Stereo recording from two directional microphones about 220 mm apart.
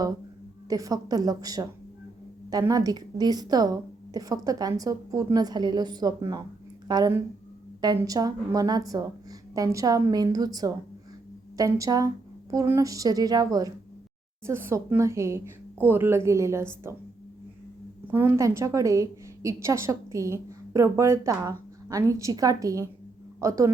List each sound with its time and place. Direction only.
0.7 s a woman's voice: 15° right (ahead or behind)
18.1 s a woman's voice: 10° right (ahead or behind)